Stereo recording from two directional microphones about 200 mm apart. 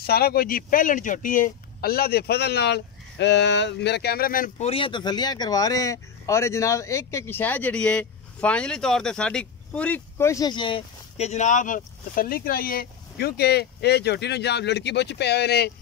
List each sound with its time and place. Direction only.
0.0 s speech: 50° left (ahead or behind)
4.6 s speech: 25° left (ahead or behind); by 15.7 s 55° left (ahead or behind)